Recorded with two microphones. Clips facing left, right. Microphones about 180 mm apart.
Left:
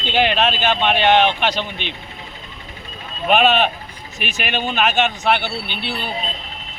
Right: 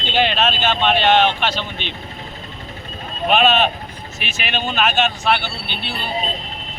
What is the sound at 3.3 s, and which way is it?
Speech, 15° left (ahead or behind).